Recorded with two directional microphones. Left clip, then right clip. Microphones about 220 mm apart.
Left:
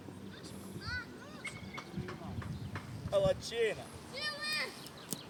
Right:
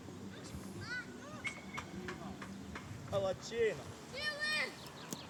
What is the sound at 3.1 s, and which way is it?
Boat, 30° left (ahead or behind).